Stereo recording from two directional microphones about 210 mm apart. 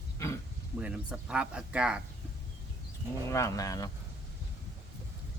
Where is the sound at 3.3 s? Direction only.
15° left (ahead or behind).